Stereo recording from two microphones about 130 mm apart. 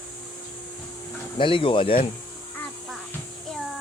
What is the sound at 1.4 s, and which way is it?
Speech, 40° left (ahead or behind).